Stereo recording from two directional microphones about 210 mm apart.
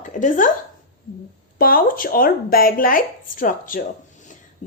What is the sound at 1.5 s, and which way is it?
A woman's voice, 45° left (ahead or behind).